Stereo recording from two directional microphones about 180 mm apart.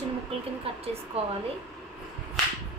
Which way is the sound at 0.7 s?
30° right (ahead or behind).